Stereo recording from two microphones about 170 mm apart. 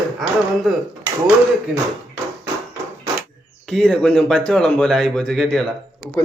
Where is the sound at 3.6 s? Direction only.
Centre (ahead or behind).